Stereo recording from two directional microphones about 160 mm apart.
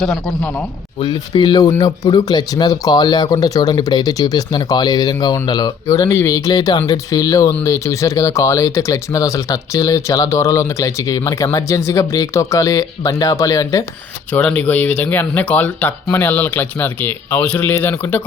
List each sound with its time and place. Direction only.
0.0 s a man's voice: centre (ahead or behind)
0.9 s speech: 25° left (ahead or behind)
14.3 s speech: 10° left (ahead or behind)